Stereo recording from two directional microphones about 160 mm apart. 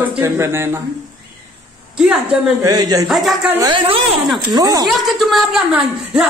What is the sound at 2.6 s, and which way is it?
Speech, 25° right (ahead or behind).